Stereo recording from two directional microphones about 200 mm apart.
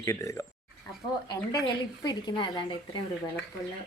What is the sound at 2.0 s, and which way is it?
Speech, 20° left (ahead or behind).